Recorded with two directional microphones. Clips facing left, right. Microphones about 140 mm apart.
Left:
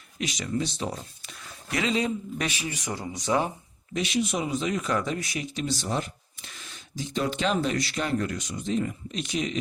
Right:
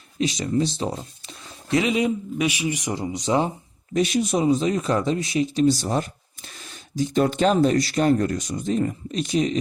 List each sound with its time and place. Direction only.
0.2 s speech: 30° right (ahead or behind)
3.9 s speech: 40° right (ahead or behind)